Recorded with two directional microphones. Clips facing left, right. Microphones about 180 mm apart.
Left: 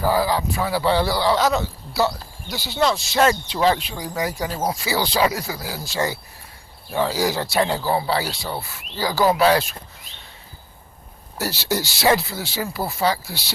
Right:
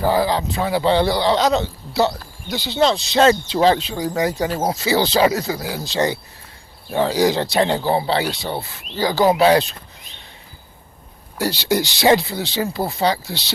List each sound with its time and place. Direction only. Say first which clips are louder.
0.0 s speech: right 2 dB; 25° right (ahead or behind)
11.3 s speech: right 5 dB; 15° right (ahead or behind)